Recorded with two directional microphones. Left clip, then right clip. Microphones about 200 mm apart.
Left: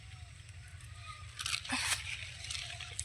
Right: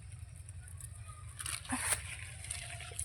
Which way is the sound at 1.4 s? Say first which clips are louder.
Left 4 dB; 65° right (ahead or behind).